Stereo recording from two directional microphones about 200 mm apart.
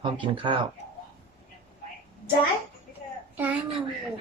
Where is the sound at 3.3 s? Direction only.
10° right (ahead or behind).